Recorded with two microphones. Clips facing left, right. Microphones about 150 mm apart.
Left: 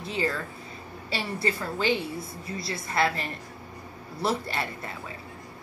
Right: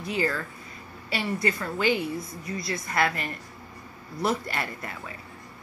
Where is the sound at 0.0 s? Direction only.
25° left (ahead or behind).